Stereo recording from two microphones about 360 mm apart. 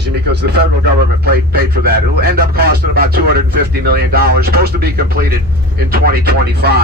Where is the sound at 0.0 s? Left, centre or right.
Right.